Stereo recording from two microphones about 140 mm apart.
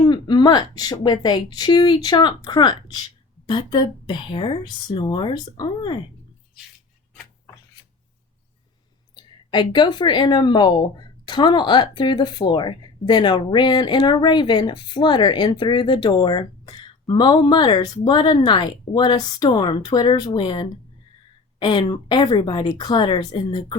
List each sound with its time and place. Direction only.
0.0 s speech: 30° left (ahead or behind)
9.1 s speech: 30° left (ahead or behind)